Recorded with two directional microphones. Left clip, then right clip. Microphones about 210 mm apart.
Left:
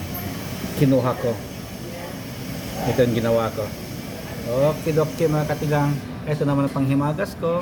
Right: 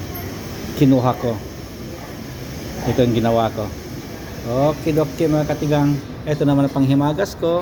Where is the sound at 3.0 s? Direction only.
5° right (ahead or behind).